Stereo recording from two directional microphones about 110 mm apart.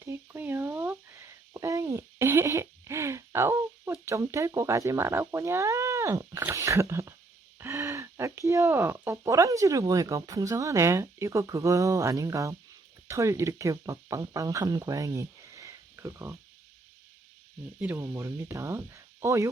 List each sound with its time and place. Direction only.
0.0 s a sound: 20° right (ahead or behind)
6.5 s speech: 25° right (ahead or behind)
17.7 s speech: 15° right (ahead or behind)
18.0 s speech: 25° right (ahead or behind)